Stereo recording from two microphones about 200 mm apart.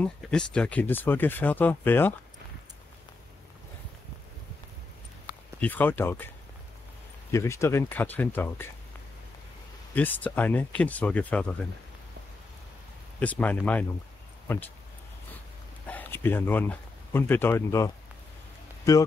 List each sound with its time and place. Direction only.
0.0 s speech: 5° left (ahead or behind)
5.6 s speech: 10° left (ahead or behind)
7.2 s speech: 15° left (ahead or behind)
9.9 s speech: 10° left (ahead or behind)
13.2 s speech: 5° left (ahead or behind)
15.9 s speech: 10° left (ahead or behind)